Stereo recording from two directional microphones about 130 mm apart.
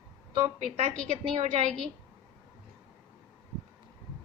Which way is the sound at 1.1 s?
55° right (ahead or behind).